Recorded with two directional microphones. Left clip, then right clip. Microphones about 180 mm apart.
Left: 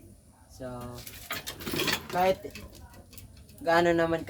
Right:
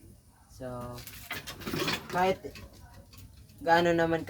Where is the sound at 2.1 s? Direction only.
10° right (ahead or behind).